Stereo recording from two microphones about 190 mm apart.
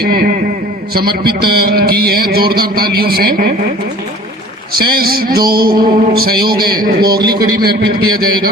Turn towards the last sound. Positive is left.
turn(degrees=-55)  # may be behind; listen again after turning